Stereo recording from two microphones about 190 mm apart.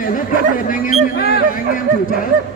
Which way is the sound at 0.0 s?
45° left (ahead or behind).